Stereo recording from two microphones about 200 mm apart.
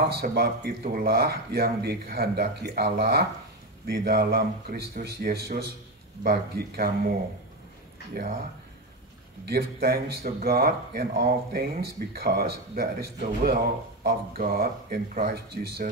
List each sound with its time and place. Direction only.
0.1 s speech: 55° right (ahead or behind)
8.1 s speech: 50° right (ahead or behind)
9.5 s speech: 50° right (ahead or behind)